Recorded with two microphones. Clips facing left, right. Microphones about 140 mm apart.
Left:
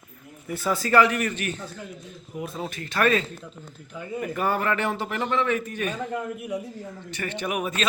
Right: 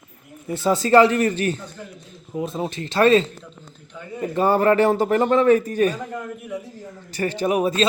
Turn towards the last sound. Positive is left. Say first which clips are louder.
# right 8 dB
turn(degrees=-30)  # may be behind; listen again after turning